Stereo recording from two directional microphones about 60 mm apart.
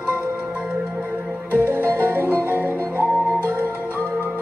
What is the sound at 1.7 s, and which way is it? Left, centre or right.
Music, right.